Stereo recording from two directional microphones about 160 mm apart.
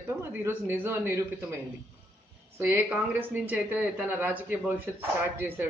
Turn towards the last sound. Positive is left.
turn(degrees=-10)  # may be behind; listen again after turning